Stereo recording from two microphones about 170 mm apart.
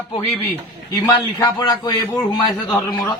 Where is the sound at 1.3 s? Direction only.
25° left (ahead or behind).